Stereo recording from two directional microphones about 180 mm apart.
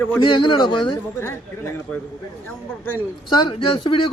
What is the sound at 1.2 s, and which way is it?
A man's voice, 15° left (ahead or behind).